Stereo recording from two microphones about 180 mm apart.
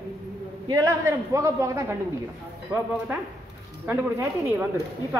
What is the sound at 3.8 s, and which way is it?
Speech, 10° right (ahead or behind).